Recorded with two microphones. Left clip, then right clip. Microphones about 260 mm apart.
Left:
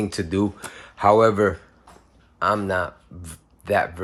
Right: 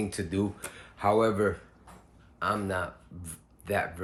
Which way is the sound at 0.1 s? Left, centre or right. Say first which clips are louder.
Left 8 dB; left.